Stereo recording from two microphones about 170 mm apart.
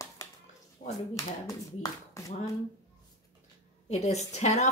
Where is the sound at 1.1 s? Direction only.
20° left (ahead or behind).